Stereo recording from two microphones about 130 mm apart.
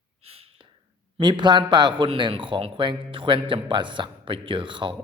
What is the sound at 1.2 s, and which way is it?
Speech, 35° right (ahead or behind).